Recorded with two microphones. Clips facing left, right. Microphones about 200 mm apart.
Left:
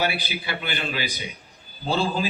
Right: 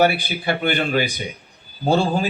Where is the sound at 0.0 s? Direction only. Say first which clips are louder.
Right 8 dB; 50° right (ahead or behind).